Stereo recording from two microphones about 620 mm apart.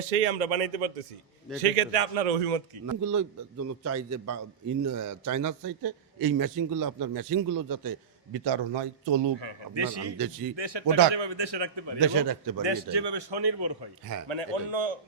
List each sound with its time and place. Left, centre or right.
0.3 s speech: right
1.7 s a man's voice: right
2.8 s a man's voice: right
14.3 s a man's voice: right